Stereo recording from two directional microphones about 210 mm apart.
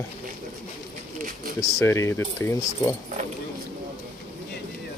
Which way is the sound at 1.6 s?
15° left (ahead or behind).